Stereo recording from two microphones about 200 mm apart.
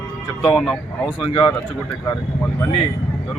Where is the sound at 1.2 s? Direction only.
25° left (ahead or behind).